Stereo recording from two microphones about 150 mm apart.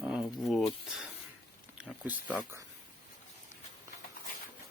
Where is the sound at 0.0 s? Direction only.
5° right (ahead or behind).